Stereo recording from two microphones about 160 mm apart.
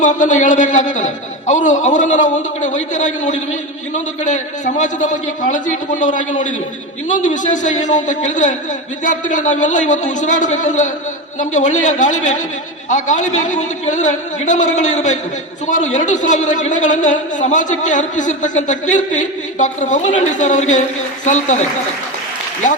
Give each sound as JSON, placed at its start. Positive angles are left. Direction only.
{"t": 0.0, "sound": "a man's voice", "side_deg": 50}